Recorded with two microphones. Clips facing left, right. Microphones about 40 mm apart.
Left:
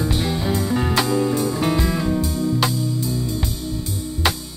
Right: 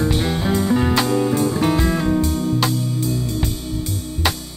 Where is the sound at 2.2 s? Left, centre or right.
Right.